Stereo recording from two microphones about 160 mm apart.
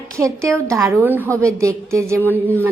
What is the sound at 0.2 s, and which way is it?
A woman's voice, 20° right (ahead or behind).